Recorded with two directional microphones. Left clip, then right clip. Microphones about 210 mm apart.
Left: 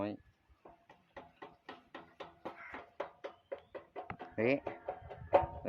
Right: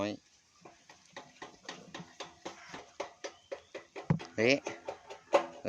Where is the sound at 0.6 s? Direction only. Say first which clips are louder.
Right 2 dB; 35° right (ahead or behind).